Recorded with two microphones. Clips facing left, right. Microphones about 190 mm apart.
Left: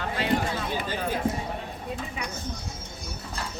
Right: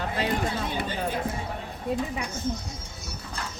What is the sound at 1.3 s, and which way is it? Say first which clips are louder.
Speech: left 4 dB; 25° left (ahead or behind).